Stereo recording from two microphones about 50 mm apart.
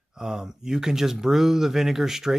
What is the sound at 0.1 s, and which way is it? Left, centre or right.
Speech, centre.